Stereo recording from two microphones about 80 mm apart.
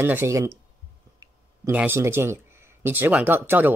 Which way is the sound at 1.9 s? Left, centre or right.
Right.